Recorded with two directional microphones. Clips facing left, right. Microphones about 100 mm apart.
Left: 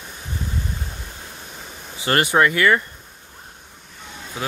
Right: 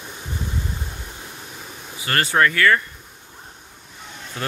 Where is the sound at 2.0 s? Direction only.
20° left (ahead or behind).